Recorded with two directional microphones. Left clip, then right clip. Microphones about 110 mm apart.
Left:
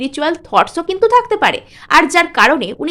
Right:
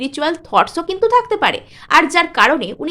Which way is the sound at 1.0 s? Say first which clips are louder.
Left 2 dB; 30° left (ahead or behind).